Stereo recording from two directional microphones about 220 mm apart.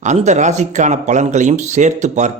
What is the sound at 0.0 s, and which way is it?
Speech, 35° right (ahead or behind).